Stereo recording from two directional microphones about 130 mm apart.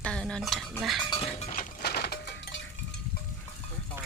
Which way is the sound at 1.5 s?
90° left.